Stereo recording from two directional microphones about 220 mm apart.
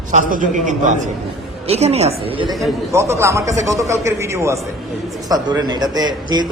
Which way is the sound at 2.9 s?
10° right (ahead or behind).